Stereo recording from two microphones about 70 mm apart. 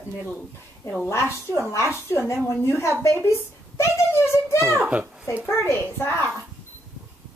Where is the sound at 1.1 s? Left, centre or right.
Left.